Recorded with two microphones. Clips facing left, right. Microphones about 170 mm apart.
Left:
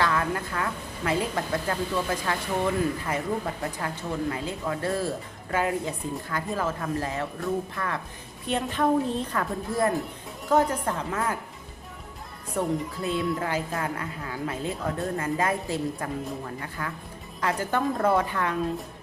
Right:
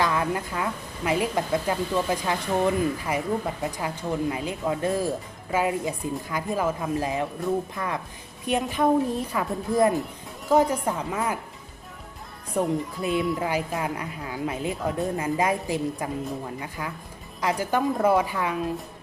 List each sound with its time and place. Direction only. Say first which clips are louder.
0.0 s speech: right 1 dB; 15° right (ahead or behind)
12.5 s speech: right 2 dB; 15° right (ahead or behind)